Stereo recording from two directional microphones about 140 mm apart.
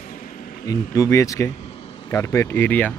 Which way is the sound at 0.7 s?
25° left (ahead or behind).